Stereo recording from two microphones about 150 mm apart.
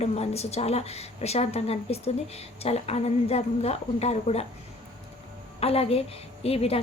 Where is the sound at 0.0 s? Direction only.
45° left (ahead or behind).